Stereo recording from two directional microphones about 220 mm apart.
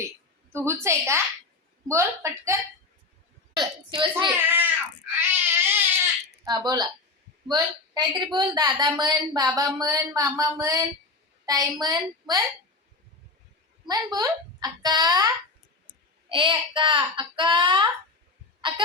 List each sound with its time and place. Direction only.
0.5 s a woman's voice: 10° right (ahead or behind)
3.5 s a sound: 20° right (ahead or behind)
4.4 s baby cry: 10° right (ahead or behind)
6.4 s a woman's voice: 20° right (ahead or behind)
13.8 s a woman's voice: 15° right (ahead or behind)
16.3 s a child's voice: 20° right (ahead or behind)